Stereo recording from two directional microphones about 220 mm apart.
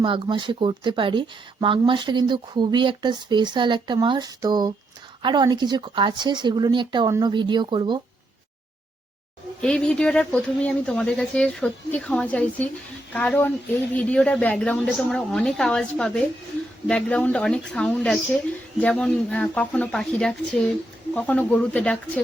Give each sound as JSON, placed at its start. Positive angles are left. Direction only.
{"t": 0.0, "sound": "speech", "side_deg": -20}
{"t": 9.6, "sound": "a woman's voice", "side_deg": 5}